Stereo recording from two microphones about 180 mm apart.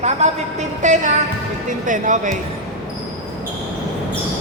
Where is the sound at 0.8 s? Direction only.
40° right (ahead or behind).